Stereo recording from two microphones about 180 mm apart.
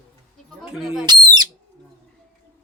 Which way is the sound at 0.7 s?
Centre (ahead or behind).